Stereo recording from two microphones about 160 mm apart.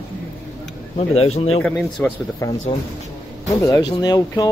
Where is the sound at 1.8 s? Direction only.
5° left (ahead or behind).